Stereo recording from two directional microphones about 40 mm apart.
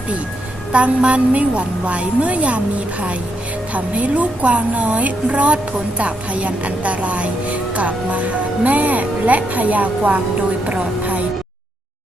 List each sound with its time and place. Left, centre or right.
0.7 s a woman's voice: right
3.8 s a woman's voice: right